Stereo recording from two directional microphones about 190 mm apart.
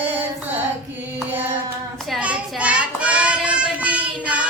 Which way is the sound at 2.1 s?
5° right (ahead or behind).